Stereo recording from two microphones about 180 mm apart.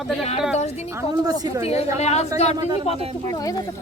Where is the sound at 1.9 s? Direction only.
35° left (ahead or behind).